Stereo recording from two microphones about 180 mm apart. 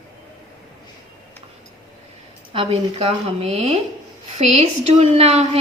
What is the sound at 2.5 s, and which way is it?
A woman's voice, 35° right (ahead or behind).